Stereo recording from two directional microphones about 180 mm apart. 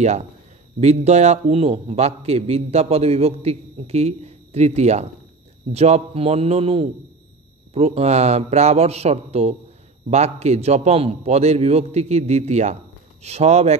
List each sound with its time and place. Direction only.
0.0 s a man's voice: 40° right (ahead or behind)